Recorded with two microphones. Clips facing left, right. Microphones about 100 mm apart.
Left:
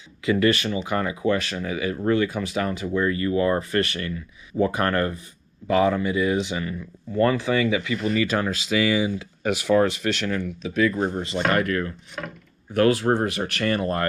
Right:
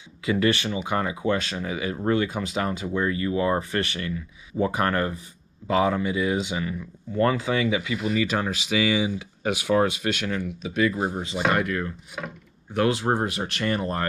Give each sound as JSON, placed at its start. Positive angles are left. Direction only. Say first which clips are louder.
{"t": 0.3, "sound": "speech", "louder": "left 2 dB", "side_deg": -20}